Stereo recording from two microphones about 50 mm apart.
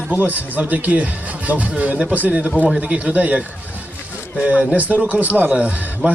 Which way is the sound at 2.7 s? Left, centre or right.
Right.